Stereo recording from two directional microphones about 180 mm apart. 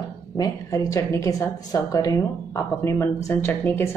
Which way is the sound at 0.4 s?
20° left (ahead or behind).